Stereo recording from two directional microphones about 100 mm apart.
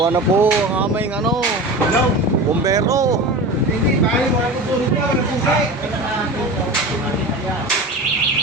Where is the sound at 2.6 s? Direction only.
35° right (ahead or behind).